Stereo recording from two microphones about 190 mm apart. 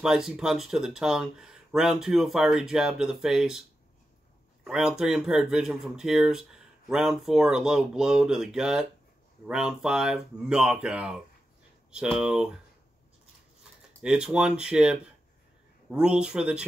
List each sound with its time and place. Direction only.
0.0 s speech: 5° right (ahead or behind)
4.6 s speech: 5° right (ahead or behind)
14.0 s speech: 5° right (ahead or behind)